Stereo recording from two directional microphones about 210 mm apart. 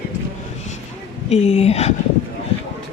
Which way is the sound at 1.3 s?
30° left (ahead or behind).